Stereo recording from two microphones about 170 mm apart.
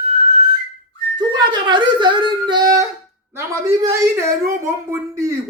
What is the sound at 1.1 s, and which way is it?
A man's voice, 25° right (ahead or behind).